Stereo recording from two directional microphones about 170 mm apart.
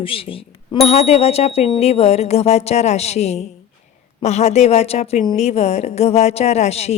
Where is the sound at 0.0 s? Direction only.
30° left (ahead or behind).